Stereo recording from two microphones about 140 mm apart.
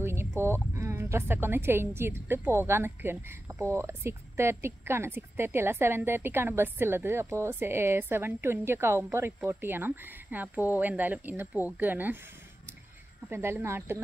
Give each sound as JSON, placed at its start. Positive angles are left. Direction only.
{"t": 0.0, "sound": "a sound", "side_deg": -15}
{"t": 0.4, "sound": "a woman's voice", "side_deg": -20}
{"t": 13.3, "sound": "a woman's voice", "side_deg": -15}